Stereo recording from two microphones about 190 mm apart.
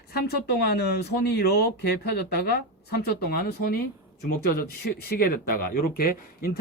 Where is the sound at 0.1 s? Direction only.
55° left (ahead or behind).